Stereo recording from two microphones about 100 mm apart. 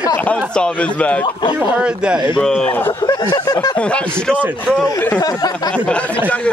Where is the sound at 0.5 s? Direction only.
10° left (ahead or behind).